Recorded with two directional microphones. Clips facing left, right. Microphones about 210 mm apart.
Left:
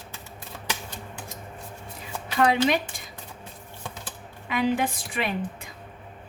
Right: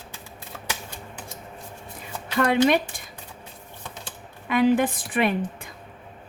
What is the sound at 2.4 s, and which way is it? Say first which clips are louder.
Speech: right 2 dB; 50° right (ahead or behind).